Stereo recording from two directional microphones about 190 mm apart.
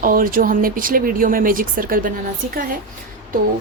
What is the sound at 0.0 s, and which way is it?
Speech, 50° right (ahead or behind).